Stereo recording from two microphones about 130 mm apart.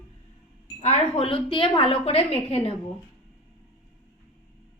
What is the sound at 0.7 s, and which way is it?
Speech, 55° left (ahead or behind).